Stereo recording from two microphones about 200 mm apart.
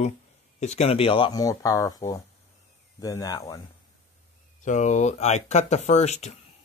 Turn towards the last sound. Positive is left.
turn(degrees=35)  # may be behind; listen again after turning